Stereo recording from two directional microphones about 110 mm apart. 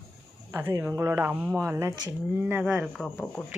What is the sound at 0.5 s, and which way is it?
Speech, 20° right (ahead or behind).